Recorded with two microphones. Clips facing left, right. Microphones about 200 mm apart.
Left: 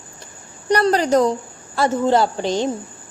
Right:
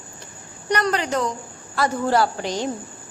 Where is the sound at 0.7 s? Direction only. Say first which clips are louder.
Left 6 dB; 35° left (ahead or behind).